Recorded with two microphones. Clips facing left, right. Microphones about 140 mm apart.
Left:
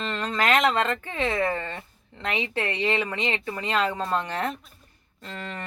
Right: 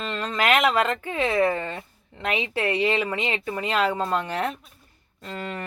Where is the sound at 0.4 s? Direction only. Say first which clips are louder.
Right 1 dB; 10° right (ahead or behind).